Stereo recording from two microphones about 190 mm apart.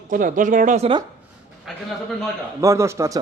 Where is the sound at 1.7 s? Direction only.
Centre (ahead or behind).